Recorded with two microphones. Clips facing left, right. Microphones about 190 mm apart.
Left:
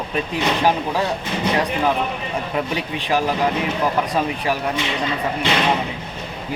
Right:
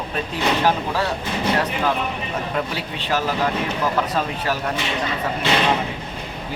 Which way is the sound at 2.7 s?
15° left (ahead or behind).